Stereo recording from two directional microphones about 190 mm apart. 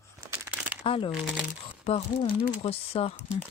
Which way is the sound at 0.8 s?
30° left (ahead or behind).